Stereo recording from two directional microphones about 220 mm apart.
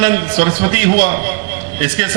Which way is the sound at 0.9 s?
40° right (ahead or behind).